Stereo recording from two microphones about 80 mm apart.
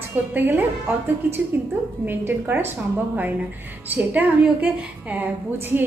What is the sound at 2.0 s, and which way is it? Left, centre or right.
Speech, right.